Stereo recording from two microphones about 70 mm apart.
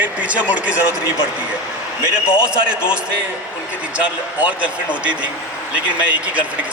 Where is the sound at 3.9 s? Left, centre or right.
Right.